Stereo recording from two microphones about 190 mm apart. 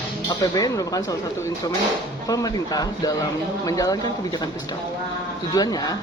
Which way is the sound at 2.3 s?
20° left (ahead or behind).